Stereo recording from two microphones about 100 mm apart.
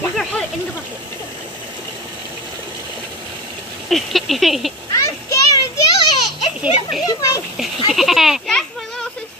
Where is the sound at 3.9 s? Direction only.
Centre (ahead or behind).